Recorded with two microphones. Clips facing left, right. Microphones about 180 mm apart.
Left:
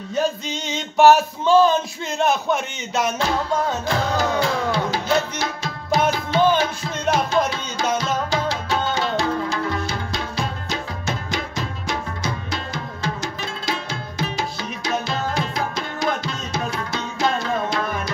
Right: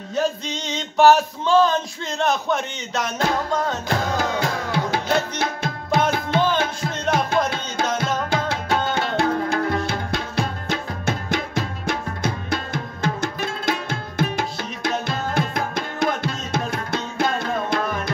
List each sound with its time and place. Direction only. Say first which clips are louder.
0.1 s music: even; 5° left (ahead or behind)
4.2 s music: left 3 dB; 55° right (ahead or behind)